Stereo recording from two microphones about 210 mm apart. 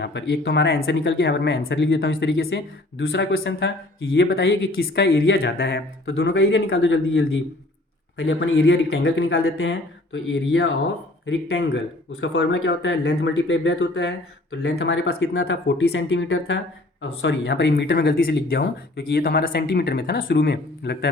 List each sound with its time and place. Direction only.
0.0 s speech: 55° left (ahead or behind)